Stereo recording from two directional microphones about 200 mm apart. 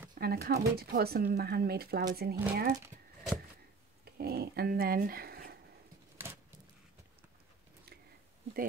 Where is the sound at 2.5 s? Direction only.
40° right (ahead or behind).